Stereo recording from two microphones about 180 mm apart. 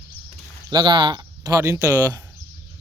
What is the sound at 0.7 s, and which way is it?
Speech, 25° right (ahead or behind).